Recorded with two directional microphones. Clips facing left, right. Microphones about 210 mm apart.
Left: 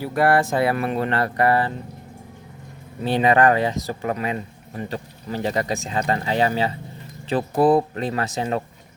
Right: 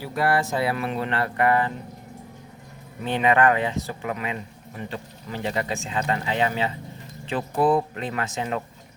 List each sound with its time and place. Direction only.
0.0 s speech: 55° left (ahead or behind); by 1.7 s 35° left (ahead or behind)
3.0 s speech: 35° left (ahead or behind)